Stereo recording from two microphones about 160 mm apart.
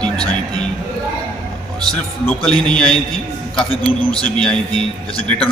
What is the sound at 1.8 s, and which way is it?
A man's voice, 5° left (ahead or behind).